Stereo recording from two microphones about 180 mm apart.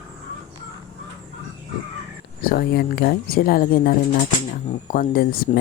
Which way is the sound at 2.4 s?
55° left (ahead or behind).